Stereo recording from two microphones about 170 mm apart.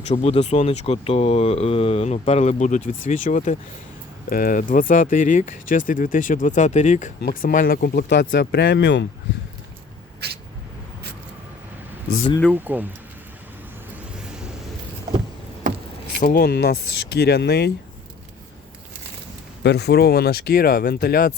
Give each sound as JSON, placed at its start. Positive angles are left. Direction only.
{"t": 0.0, "sound": "speech", "side_deg": 40}
{"t": 7.2, "sound": "speech", "side_deg": 70}
{"t": 7.5, "sound": "speech", "side_deg": 60}
{"t": 10.2, "sound": "vehicle", "side_deg": -75}
{"t": 12.5, "sound": "speech", "side_deg": -10}
{"t": 16.2, "sound": "speech", "side_deg": 60}
{"t": 19.6, "sound": "speech", "side_deg": 75}